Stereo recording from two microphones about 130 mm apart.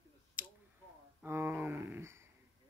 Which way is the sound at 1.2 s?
15° right (ahead or behind).